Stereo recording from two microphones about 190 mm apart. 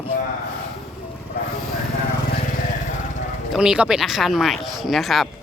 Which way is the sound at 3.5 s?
5° right (ahead or behind).